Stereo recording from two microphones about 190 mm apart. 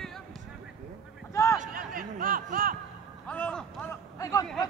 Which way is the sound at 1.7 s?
50° right (ahead or behind).